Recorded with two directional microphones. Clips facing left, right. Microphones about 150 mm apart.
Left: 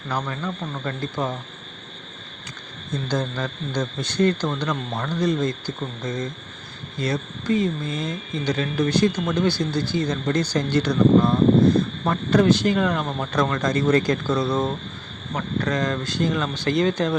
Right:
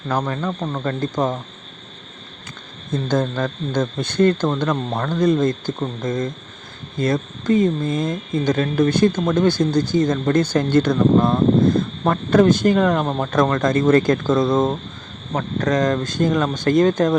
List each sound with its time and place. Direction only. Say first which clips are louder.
0.1 s speech: right 5 dB; 50° right (ahead or behind)
3.1 s speech: right 6 dB; 50° right (ahead or behind)